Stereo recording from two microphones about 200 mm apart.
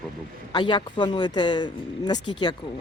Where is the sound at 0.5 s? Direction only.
25° left (ahead or behind).